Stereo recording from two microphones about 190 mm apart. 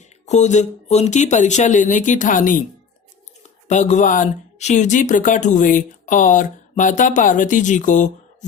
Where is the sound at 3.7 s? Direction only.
40° left (ahead or behind).